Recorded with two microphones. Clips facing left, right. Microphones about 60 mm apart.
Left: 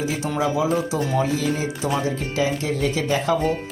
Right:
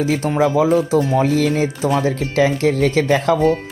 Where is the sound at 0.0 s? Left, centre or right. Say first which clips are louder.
Right 6 dB; right.